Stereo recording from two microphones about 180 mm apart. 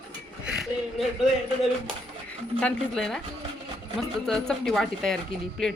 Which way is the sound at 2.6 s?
5° left (ahead or behind).